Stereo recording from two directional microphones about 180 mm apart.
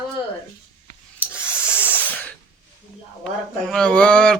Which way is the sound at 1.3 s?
10° left (ahead or behind).